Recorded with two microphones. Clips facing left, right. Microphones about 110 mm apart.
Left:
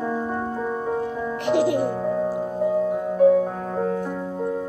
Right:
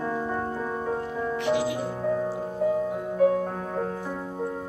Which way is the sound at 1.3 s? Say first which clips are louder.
Left 6 dB; 55° left (ahead or behind).